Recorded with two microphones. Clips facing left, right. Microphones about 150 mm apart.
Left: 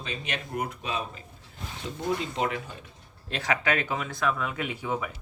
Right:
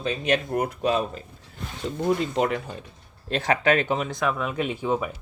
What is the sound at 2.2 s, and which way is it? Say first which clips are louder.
Speech: right 5 dB; 45° right (ahead or behind).